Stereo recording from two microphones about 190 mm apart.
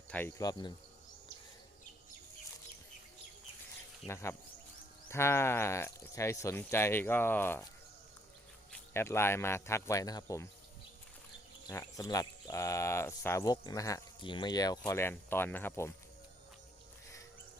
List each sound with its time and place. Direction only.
0.1 s speech: 10° left (ahead or behind)
4.0 s speech: 15° left (ahead or behind)
8.7 s speech: 10° left (ahead or behind)
11.7 s speech: 15° left (ahead or behind)